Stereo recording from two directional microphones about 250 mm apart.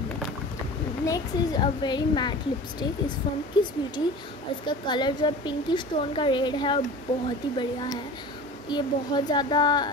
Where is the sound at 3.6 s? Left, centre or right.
Centre.